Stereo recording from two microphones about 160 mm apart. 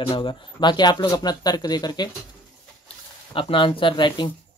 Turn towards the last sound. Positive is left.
turn(degrees=30)  # may be behind; listen again after turning